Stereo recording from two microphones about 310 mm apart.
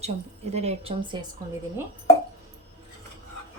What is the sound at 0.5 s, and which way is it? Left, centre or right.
Speech, centre.